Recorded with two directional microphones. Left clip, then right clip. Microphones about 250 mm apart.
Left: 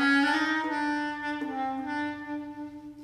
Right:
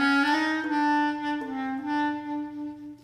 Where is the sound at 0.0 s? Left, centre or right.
Right.